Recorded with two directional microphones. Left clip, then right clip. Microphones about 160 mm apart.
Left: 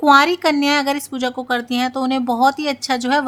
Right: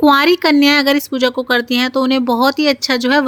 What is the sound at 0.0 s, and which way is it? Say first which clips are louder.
A woman's voice: right 1 dB; 15° right (ahead or behind).